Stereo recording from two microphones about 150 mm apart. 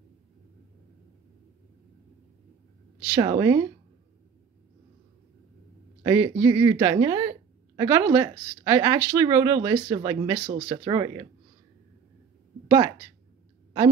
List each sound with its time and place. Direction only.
3.2 s a woman's voice: 25° right (ahead or behind)
6.0 s a woman's voice: 20° right (ahead or behind)
12.6 s a woman's voice: 25° right (ahead or behind)